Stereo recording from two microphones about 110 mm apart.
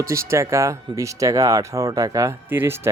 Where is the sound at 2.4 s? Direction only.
20° right (ahead or behind).